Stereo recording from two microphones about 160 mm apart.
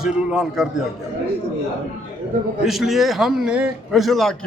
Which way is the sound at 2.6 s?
Centre (ahead or behind).